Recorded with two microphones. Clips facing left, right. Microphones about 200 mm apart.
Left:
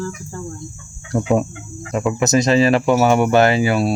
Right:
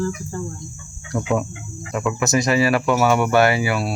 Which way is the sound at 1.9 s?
25° left (ahead or behind).